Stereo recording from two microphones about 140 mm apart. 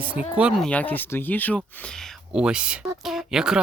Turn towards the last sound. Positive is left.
turn(degrees=-5)  # may be behind; listen again after turning